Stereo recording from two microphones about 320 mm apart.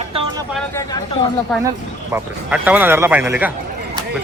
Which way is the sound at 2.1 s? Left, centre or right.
Centre.